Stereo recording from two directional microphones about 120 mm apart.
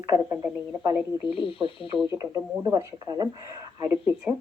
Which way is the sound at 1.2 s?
50° left (ahead or behind).